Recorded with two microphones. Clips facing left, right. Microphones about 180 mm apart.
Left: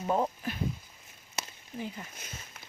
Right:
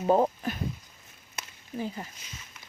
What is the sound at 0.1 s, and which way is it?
Speech, 40° right (ahead or behind).